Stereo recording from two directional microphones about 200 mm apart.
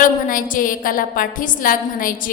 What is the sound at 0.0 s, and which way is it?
A woman's voice, 45° left (ahead or behind).